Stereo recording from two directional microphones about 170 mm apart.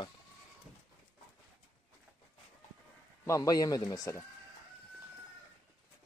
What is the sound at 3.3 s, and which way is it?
Speech, 20° left (ahead or behind).